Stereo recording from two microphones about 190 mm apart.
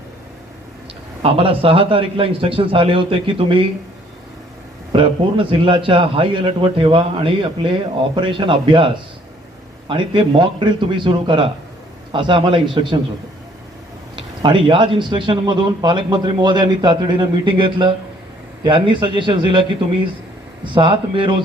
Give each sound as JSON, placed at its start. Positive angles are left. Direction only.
{"t": 1.2, "sound": "a man's voice", "side_deg": -30}
{"t": 4.9, "sound": "a man's voice", "side_deg": -25}
{"t": 9.9, "sound": "a man's voice", "side_deg": -25}
{"t": 14.4, "sound": "a man's voice", "side_deg": -25}
{"t": 20.7, "sound": "a man's voice", "side_deg": -25}